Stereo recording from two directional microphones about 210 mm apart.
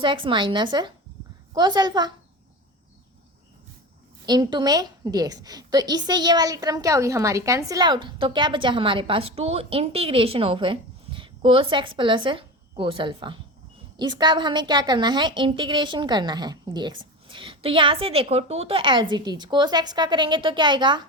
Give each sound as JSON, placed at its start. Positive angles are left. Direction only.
{"t": 0.0, "sound": "a woman's voice", "side_deg": -25}
{"t": 4.3, "sound": "a woman's voice", "side_deg": -20}